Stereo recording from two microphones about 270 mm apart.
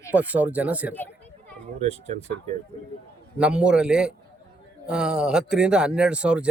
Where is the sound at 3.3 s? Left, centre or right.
Centre.